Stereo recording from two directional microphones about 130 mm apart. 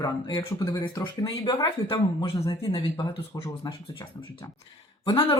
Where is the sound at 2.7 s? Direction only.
35° left (ahead or behind).